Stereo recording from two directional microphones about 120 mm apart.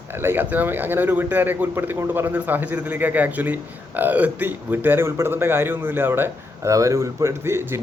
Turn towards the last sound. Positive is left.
turn(degrees=-20)  # may be behind; listen again after turning